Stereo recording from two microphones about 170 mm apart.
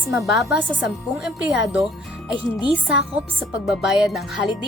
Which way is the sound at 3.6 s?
5° right (ahead or behind).